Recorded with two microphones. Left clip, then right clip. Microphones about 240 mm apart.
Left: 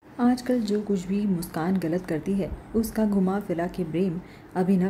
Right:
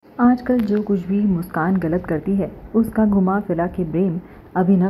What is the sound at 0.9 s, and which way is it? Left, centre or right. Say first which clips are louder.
A woman's voice: right 6 dB; centre.